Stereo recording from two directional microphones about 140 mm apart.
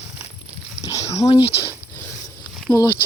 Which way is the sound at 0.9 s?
25° left (ahead or behind).